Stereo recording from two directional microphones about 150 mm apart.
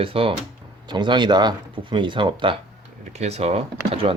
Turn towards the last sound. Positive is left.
turn(degrees=-40)  # may be behind; listen again after turning